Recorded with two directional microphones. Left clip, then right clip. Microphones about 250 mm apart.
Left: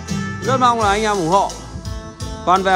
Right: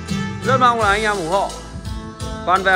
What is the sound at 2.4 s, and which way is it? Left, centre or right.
Music, left.